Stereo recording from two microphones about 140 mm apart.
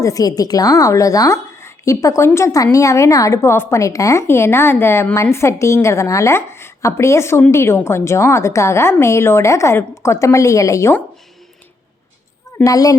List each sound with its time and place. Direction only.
0.0 s a woman's voice: 25° left (ahead or behind)
12.6 s a woman's voice: 25° left (ahead or behind)